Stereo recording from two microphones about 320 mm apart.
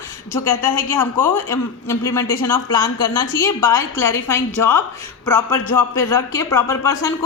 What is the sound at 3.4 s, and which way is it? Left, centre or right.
A woman's voice, centre.